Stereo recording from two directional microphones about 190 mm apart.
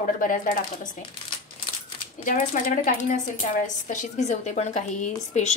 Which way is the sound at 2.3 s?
40° left (ahead or behind).